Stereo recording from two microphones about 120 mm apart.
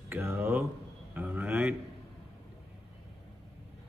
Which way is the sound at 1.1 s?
15° right (ahead or behind).